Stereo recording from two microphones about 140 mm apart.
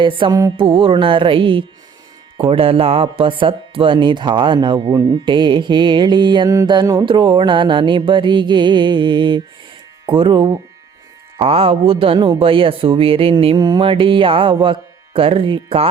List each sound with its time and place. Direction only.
0.0 s speech: 35° right (ahead or behind)